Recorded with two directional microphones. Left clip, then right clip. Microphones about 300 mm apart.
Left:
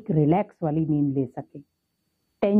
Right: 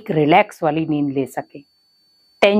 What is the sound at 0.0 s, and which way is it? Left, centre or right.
A woman's voice, centre.